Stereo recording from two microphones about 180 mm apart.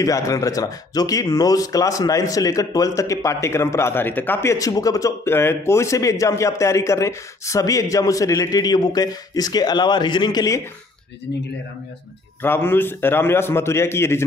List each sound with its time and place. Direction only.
0.0 s speech: 20° left (ahead or behind)
12.4 s a man's voice: 10° left (ahead or behind)